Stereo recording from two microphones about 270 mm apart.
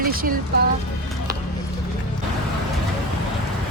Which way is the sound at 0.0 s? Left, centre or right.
Right.